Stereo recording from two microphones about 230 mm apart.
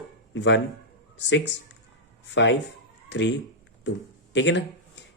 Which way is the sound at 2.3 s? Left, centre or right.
Left.